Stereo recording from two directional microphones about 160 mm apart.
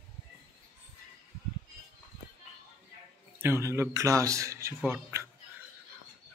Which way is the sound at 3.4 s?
15° right (ahead or behind).